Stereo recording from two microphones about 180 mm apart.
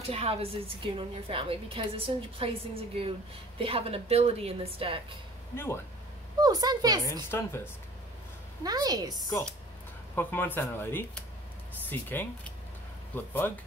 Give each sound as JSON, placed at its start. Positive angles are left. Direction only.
{"t": 0.0, "sound": "a woman's voice", "side_deg": -35}
{"t": 6.4, "sound": "a woman's voice", "side_deg": -20}
{"t": 7.2, "sound": "speech", "side_deg": 15}
{"t": 8.6, "sound": "a woman's voice", "side_deg": -20}
{"t": 10.1, "sound": "speech", "side_deg": 10}